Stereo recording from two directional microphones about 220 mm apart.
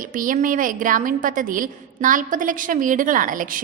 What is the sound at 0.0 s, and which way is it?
A woman's voice, 40° right (ahead or behind).